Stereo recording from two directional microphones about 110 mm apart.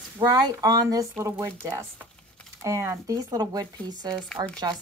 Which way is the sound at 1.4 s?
25° right (ahead or behind).